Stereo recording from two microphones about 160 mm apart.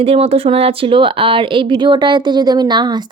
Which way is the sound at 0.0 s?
40° right (ahead or behind).